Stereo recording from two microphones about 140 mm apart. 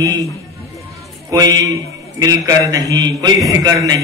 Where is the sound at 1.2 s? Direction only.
25° right (ahead or behind).